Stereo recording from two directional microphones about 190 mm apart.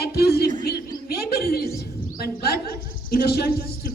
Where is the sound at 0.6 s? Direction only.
55° left (ahead or behind).